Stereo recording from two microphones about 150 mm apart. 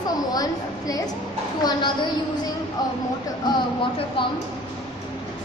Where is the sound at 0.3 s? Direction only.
25° left (ahead or behind).